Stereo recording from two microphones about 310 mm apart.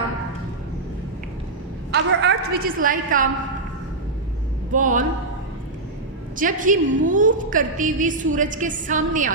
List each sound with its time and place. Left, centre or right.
1.9 s a woman's voice: right
4.7 s a woman's voice: right
6.3 s a woman's voice: right